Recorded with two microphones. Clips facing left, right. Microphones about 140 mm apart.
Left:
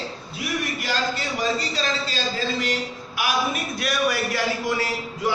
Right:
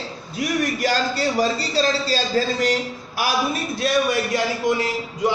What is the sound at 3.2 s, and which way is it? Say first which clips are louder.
A man's voice: right 2 dB; 30° right (ahead or behind).